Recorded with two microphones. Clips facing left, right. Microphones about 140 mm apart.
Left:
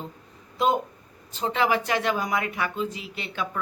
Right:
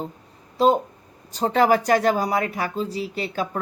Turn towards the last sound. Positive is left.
turn(degrees=-40)  # may be behind; listen again after turning